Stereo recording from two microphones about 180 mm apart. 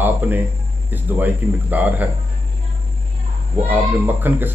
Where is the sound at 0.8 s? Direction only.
10° right (ahead or behind).